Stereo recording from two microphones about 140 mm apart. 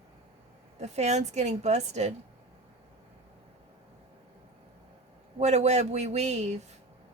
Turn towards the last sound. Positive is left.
turn(degrees=-55)  # may be behind; listen again after turning